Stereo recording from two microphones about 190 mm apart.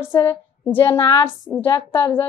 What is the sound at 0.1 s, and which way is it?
A woman's voice, 10° left (ahead or behind).